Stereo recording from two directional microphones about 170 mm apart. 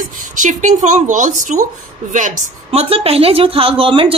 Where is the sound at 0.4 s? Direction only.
50° right (ahead or behind).